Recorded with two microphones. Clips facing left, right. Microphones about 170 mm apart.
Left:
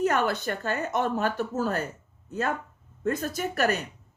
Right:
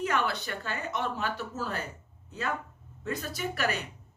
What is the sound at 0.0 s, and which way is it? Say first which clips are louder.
A woman's voice: left 5 dB; 45° left (ahead or behind).